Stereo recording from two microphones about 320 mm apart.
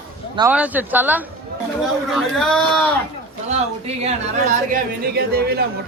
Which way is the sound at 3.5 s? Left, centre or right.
Centre.